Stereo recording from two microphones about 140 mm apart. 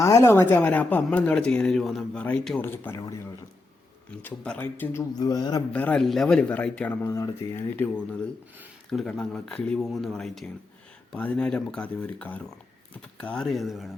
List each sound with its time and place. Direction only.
0.0 s speech: 20° left (ahead or behind)
5.2 s a man's voice: 30° left (ahead or behind)
5.7 s speech: 10° left (ahead or behind)